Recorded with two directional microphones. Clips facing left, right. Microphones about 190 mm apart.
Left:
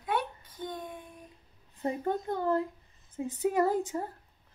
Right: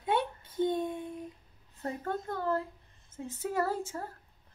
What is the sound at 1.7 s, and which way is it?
Speech, 15° left (ahead or behind).